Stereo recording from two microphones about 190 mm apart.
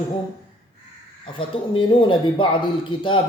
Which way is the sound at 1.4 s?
25° left (ahead or behind).